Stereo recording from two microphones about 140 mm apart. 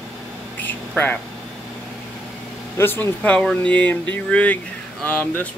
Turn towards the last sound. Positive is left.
turn(degrees=10)  # may be behind; listen again after turning